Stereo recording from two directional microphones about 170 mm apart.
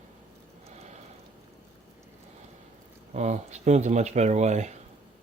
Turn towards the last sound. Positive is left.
turn(degrees=-40)  # may be behind; listen again after turning